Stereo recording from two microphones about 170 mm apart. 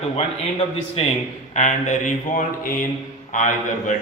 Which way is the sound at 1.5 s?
45° left (ahead or behind).